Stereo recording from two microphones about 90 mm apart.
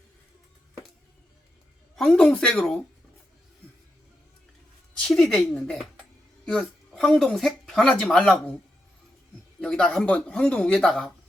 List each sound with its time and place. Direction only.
2.0 s speech: 5° left (ahead or behind)
4.9 s speech: 5° left (ahead or behind)
6.4 s a sound: 5° left (ahead or behind)
7.3 s speech: 5° left (ahead or behind)
9.6 s speech: 10° left (ahead or behind)